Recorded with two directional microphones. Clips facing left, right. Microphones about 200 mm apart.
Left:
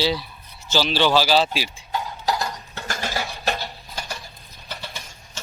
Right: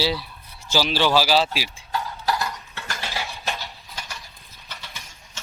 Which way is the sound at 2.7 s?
45° left (ahead or behind).